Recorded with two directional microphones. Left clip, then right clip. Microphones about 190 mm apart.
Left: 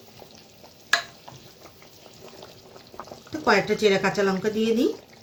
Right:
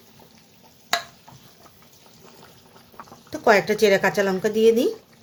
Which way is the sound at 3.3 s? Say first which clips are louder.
Right 3 dB; 55° right (ahead or behind).